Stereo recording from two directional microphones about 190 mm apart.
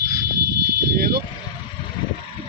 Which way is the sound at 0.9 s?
50° right (ahead or behind).